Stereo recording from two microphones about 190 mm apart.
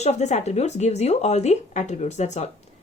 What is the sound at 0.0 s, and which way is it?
Speech, 35° left (ahead or behind).